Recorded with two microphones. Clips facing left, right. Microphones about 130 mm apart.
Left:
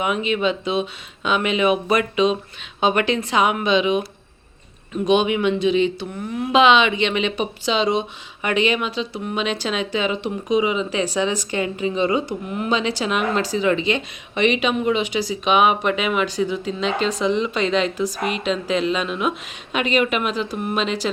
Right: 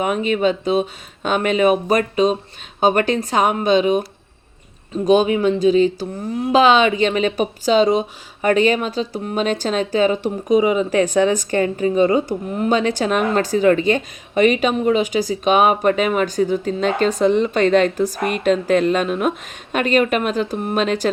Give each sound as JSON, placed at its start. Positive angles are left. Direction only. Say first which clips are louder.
{"t": 0.0, "sound": "speech", "louder": "right 3 dB", "side_deg": -45}
{"t": 5.0, "sound": "speech", "louder": "right 3 dB", "side_deg": -40}